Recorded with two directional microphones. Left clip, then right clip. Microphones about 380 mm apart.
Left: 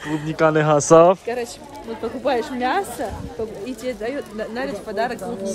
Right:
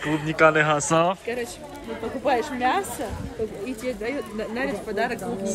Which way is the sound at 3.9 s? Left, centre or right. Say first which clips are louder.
Left 3 dB; centre.